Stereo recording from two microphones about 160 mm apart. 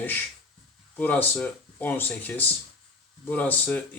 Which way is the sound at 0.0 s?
10° left (ahead or behind).